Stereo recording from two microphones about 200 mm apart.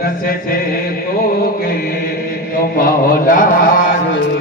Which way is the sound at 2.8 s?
45° left (ahead or behind).